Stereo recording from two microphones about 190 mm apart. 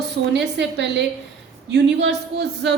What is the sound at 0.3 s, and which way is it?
A man's voice, 65° right (ahead or behind).